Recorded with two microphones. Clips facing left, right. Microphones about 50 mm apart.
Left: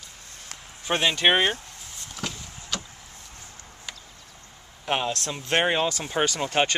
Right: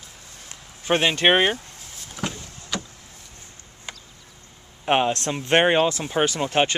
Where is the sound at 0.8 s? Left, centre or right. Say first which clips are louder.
Right 3 dB; centre.